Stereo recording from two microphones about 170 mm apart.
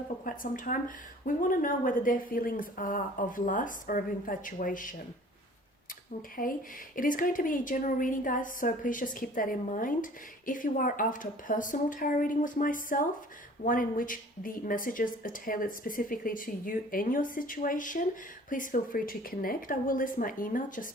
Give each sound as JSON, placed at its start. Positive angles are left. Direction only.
{"t": 0.3, "sound": "a woman's voice", "side_deg": 50}
{"t": 6.4, "sound": "a woman's voice", "side_deg": 55}